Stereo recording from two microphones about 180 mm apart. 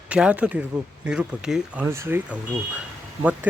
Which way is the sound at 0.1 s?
5° right (ahead or behind).